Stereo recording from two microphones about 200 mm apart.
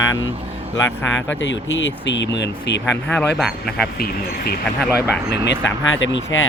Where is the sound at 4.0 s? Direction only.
50° left (ahead or behind).